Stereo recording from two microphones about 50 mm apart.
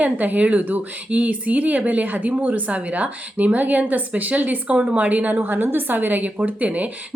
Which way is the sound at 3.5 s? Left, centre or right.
Right.